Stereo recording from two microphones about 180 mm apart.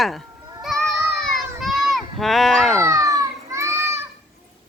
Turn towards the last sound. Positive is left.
turn(degrees=-15)  # may be behind; listen again after turning